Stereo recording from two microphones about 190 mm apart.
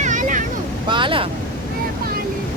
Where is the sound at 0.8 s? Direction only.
25° right (ahead or behind).